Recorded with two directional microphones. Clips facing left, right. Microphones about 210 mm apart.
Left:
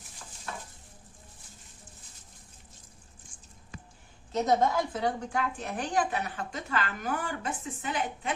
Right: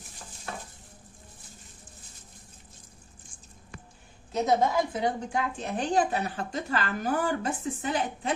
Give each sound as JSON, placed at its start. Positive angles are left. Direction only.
{"t": 4.4, "sound": "a woman's voice", "side_deg": -15}